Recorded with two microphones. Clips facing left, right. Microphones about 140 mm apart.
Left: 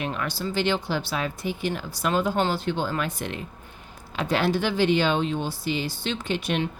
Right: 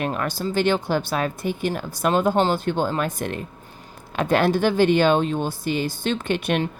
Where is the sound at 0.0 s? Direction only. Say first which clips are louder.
Right 4 dB; 45° right (ahead or behind).